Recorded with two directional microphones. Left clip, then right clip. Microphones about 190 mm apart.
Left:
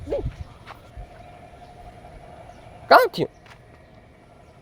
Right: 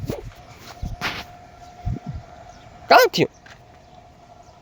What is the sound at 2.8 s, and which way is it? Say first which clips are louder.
Speech: right 1 dB; 25° right (ahead or behind).